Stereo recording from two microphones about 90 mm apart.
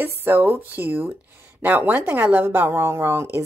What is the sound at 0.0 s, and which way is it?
Speech, 25° right (ahead or behind).